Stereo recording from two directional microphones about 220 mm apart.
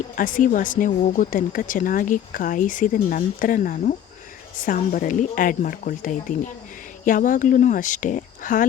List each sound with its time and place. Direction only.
0.2 s speech: 35° left (ahead or behind)